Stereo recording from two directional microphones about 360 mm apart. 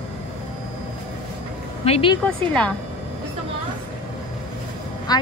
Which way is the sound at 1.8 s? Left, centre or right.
Centre.